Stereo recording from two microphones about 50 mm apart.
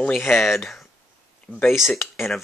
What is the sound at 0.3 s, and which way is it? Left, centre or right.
Speech, centre.